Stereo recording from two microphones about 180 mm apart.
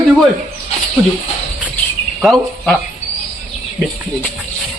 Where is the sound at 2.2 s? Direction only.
Centre (ahead or behind).